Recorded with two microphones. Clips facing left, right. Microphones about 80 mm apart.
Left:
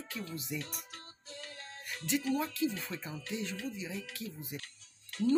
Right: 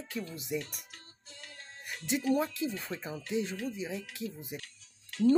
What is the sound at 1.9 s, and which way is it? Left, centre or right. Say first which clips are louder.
Music: right 1 dB; right.